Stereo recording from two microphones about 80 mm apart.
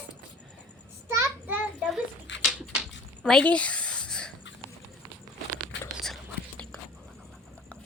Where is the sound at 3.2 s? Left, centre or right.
Centre.